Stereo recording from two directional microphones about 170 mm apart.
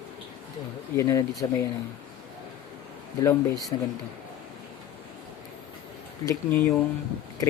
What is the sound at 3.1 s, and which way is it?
Speech, 20° left (ahead or behind).